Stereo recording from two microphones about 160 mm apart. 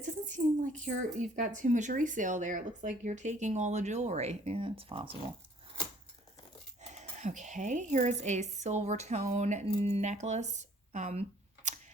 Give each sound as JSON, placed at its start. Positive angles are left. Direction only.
{"t": 0.0, "sound": "speech", "side_deg": -50}
{"t": 6.8, "sound": "a woman's voice", "side_deg": -45}